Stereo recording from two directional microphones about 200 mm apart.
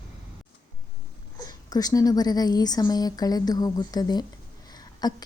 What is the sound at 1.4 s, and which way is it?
A woman's voice, 20° left (ahead or behind).